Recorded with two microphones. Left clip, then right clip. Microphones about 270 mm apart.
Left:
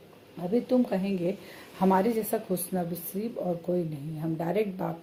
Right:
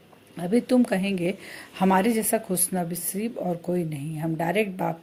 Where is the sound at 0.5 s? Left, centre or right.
Right.